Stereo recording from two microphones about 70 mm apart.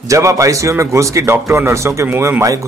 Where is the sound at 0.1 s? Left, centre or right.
Right.